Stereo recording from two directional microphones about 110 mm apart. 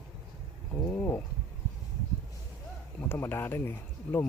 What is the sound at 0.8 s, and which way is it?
Speech, 20° left (ahead or behind).